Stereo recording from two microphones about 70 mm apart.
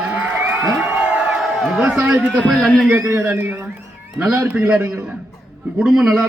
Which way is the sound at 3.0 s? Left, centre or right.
Right.